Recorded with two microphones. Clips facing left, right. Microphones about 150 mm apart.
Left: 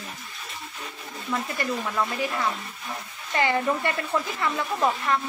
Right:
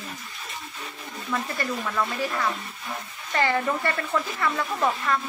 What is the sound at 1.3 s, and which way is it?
Speech, 15° left (ahead or behind).